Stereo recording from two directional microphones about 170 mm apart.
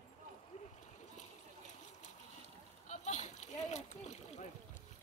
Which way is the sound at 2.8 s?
45° left (ahead or behind).